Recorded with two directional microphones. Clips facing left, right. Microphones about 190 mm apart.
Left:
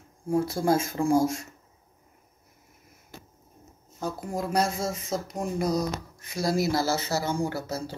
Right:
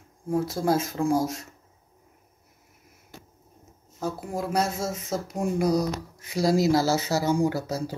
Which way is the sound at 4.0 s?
5° right (ahead or behind).